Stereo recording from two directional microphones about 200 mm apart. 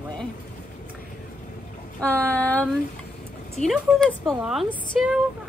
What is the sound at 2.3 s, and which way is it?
A woman's voice, 10° left (ahead or behind).